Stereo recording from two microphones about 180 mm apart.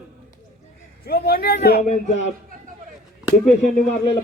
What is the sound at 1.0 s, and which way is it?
Speech, 60° left (ahead or behind).